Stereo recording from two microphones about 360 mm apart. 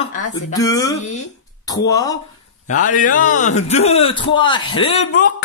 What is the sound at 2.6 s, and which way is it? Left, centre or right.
Speech, left.